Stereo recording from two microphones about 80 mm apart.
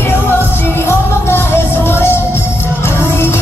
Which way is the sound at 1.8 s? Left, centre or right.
Left.